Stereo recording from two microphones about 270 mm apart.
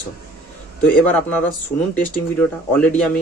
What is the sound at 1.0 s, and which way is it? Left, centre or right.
Speech, centre.